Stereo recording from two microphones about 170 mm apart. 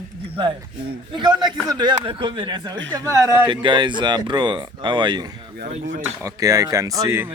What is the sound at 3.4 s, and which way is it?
Speech, 30° right (ahead or behind).